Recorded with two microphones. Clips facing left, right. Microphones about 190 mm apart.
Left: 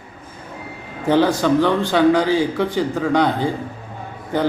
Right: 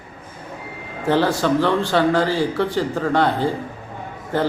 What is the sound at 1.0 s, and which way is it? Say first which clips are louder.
Speech: left 2 dB; centre (ahead or behind).